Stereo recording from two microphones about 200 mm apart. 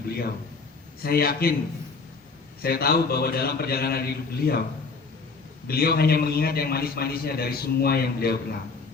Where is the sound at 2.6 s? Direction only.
50° left (ahead or behind).